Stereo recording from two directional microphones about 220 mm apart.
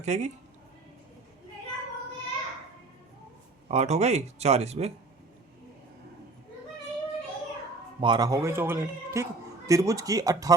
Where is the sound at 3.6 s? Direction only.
30° right (ahead or behind).